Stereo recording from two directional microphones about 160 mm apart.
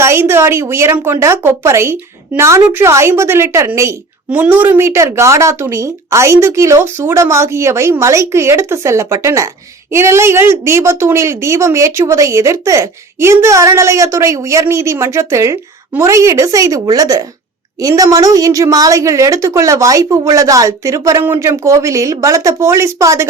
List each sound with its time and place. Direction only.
0.0 s a woman's voice: 15° right (ahead or behind)